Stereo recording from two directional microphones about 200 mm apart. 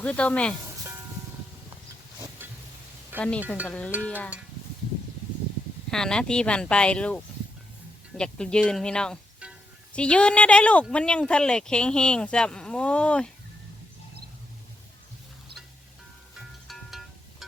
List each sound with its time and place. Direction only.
0.0 s speech: 5° left (ahead or behind)
2.4 s a sound: 10° right (ahead or behind)
3.2 s speech: 5° left (ahead or behind)
5.9 s speech: 5° left (ahead or behind)
16.6 s music: centre (ahead or behind)